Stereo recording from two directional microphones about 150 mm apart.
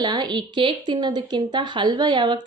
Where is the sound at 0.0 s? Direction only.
30° right (ahead or behind).